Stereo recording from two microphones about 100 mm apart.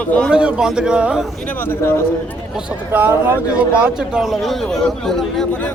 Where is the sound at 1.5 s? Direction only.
20° left (ahead or behind).